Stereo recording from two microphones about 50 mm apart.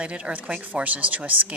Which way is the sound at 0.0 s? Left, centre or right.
Right.